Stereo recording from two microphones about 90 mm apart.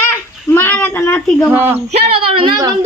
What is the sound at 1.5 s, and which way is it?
Speech, 25° right (ahead or behind).